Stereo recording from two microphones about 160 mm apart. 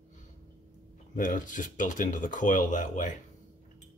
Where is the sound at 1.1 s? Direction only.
55° left (ahead or behind).